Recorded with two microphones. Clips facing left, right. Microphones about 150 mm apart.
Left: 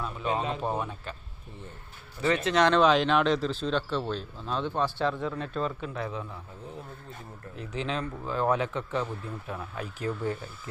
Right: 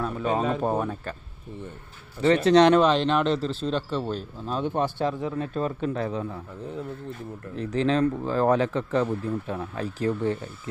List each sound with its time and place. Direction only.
0.0 s speech: 45° right (ahead or behind)
2.2 s speech: 35° right (ahead or behind)
2.7 s speech: centre (ahead or behind)
4.9 s speech: 40° right (ahead or behind)
7.7 s speech: 40° right (ahead or behind)